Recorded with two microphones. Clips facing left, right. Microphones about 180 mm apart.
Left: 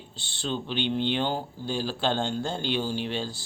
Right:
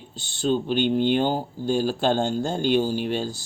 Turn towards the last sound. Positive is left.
turn(degrees=-45)  # may be behind; listen again after turning